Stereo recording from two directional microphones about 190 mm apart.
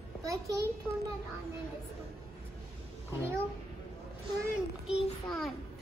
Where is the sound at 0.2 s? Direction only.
15° right (ahead or behind).